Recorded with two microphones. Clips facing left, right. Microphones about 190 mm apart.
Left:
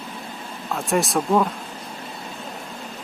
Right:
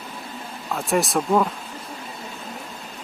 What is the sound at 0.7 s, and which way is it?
Speech, centre (ahead or behind).